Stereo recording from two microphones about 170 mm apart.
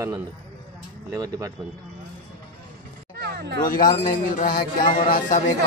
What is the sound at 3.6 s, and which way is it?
Speech, 55° left (ahead or behind).